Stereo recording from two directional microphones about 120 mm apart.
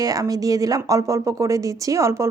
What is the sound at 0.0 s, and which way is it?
Speech, 30° right (ahead or behind).